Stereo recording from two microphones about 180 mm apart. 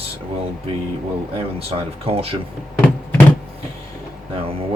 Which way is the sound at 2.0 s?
30° right (ahead or behind).